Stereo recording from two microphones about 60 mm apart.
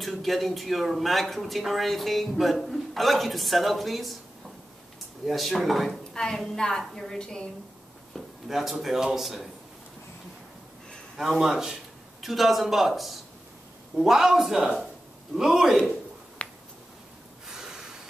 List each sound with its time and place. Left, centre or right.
0.0 s speech: centre
5.2 s a woman's voice: centre
8.5 s speech: centre
11.1 s a man's voice: centre
16.4 s finger snapping: centre
17.5 s snort: centre